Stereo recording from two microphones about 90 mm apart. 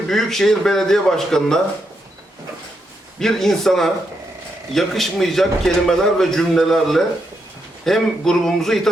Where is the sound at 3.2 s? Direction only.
5° left (ahead or behind).